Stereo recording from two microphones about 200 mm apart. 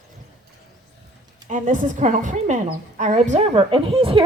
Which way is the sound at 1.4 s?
40° right (ahead or behind).